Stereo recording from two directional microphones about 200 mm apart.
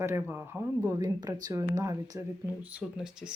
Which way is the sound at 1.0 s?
20° right (ahead or behind).